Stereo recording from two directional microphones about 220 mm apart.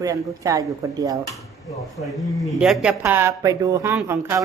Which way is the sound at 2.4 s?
Centre (ahead or behind).